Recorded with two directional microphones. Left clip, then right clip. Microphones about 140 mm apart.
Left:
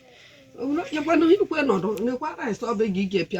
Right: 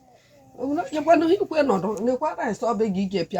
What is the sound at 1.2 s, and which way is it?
Speech, 35° right (ahead or behind).